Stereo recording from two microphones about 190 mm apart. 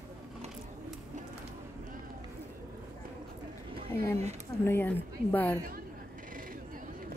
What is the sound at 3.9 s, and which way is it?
Speech, 10° left (ahead or behind).